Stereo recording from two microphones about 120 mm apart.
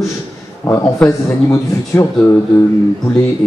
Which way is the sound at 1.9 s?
20° left (ahead or behind).